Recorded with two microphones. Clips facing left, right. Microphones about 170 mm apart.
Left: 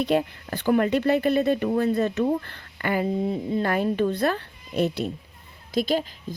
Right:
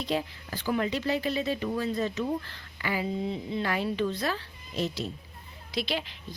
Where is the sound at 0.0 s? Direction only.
60° left (ahead or behind).